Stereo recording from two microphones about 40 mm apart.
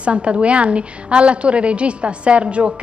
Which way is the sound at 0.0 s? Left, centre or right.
Right.